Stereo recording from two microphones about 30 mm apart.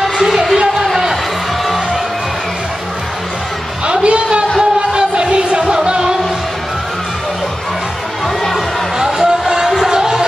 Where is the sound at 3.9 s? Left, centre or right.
Right.